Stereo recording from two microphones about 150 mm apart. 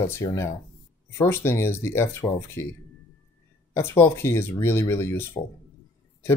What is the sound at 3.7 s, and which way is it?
Speech, 15° left (ahead or behind).